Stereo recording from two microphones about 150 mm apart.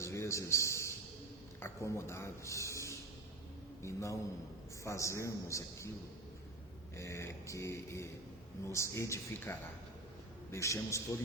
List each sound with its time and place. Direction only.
0.0 s a sound: 20° left (ahead or behind)
1.5 s speech: 15° left (ahead or behind)
6.9 s speech: 20° left (ahead or behind)